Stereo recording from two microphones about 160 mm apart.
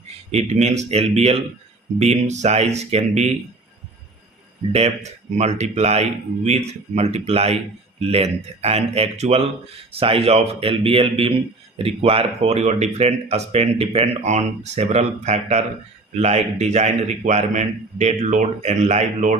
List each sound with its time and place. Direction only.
0.3 s a man's voice: 45° right (ahead or behind)
5.4 s a man's voice: 45° right (ahead or behind)